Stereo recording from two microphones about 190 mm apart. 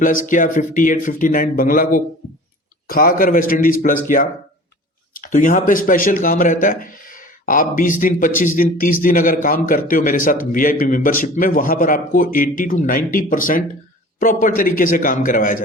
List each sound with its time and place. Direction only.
0.0 s speech: 45° left (ahead or behind)